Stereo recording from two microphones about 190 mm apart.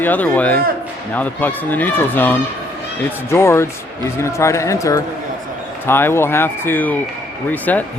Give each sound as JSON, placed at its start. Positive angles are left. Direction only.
{"t": 0.0, "sound": "speech", "side_deg": 10}